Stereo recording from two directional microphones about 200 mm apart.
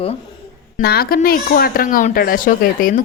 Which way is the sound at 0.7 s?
50° left (ahead or behind).